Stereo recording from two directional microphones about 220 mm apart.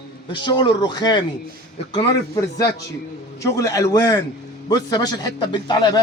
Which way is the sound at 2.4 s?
15° left (ahead or behind).